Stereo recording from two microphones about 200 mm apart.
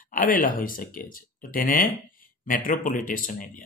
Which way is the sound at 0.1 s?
45° left (ahead or behind).